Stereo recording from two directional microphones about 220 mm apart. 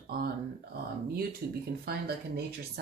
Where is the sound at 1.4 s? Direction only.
45° right (ahead or behind).